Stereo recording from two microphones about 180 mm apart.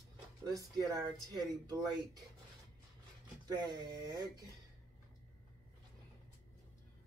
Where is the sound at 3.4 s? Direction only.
20° right (ahead or behind).